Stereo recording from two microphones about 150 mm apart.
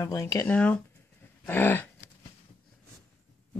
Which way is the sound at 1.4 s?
15° left (ahead or behind).